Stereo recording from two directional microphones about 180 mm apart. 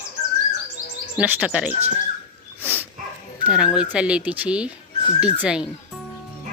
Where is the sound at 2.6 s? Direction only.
10° right (ahead or behind).